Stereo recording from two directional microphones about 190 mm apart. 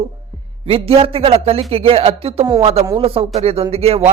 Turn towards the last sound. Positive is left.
turn(degrees=-30)  # may be behind; listen again after turning